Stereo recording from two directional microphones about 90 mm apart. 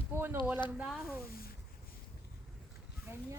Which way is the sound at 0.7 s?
5° right (ahead or behind).